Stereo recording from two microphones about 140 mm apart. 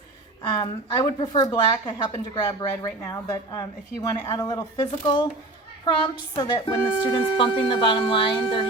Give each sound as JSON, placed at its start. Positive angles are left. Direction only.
{"t": 0.5, "sound": "a woman's voice", "side_deg": 25}
{"t": 6.3, "sound": "speech", "side_deg": 35}